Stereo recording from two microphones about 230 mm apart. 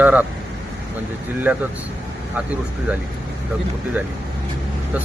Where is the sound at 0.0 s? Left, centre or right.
Centre.